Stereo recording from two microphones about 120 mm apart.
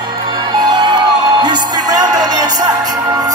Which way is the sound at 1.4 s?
35° right (ahead or behind).